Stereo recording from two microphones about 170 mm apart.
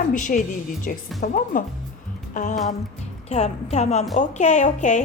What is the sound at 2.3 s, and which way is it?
Music, 45° left (ahead or behind).